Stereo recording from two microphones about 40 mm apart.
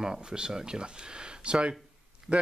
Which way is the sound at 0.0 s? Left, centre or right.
Centre.